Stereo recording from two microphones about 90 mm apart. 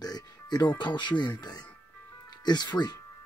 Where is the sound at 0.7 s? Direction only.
60° left (ahead or behind).